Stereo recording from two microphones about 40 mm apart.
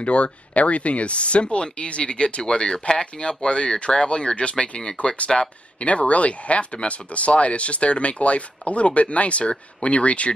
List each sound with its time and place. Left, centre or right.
0.0 s speech: left